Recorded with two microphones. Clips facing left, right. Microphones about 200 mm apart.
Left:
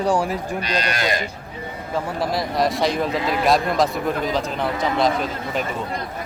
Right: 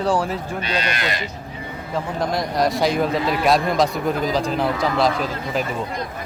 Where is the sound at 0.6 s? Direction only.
40° left (ahead or behind).